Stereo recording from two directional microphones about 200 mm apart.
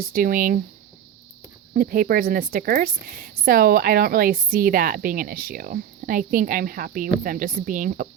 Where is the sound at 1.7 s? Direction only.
45° right (ahead or behind).